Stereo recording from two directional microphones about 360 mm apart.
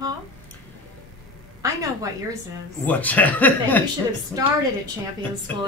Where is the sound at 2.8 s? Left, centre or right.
Centre.